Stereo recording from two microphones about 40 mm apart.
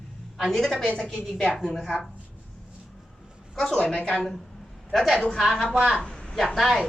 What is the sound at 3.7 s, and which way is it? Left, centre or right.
Speech, left.